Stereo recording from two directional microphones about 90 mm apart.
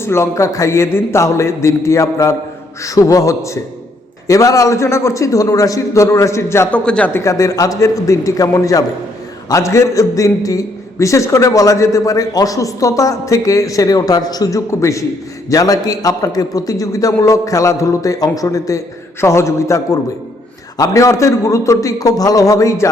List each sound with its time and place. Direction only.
0.0 s a man's voice: 30° left (ahead or behind)
6.7 s speech: 10° left (ahead or behind)
7.1 s a man's voice: 35° left (ahead or behind)